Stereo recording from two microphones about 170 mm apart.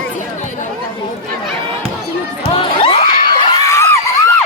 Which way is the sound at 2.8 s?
30° left (ahead or behind).